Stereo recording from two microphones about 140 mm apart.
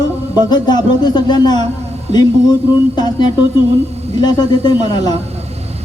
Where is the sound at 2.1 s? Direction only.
50° right (ahead or behind).